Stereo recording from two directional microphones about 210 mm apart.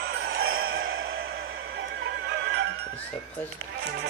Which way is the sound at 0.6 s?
70° right (ahead or behind).